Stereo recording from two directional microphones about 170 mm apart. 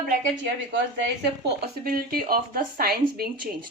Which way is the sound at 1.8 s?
60° right (ahead or behind).